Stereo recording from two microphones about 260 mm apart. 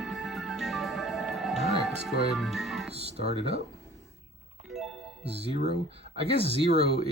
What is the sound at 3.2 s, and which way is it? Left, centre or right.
Speech, right.